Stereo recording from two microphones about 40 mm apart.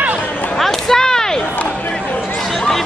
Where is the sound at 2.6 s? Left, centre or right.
Centre.